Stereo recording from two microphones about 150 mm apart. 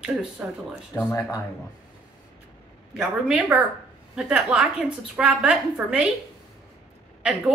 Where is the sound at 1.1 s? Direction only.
20° left (ahead or behind).